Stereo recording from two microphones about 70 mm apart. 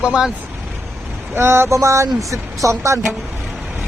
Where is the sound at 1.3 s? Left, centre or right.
Right.